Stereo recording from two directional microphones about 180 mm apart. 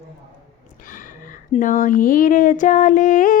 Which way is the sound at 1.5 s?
45° left (ahead or behind).